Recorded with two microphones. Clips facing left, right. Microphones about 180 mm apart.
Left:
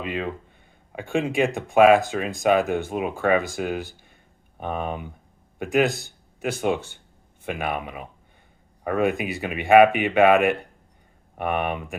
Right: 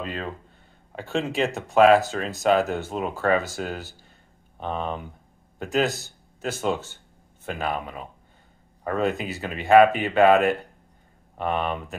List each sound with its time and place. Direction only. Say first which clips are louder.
0.0 s speech: left 3 dB; 10° left (ahead or behind)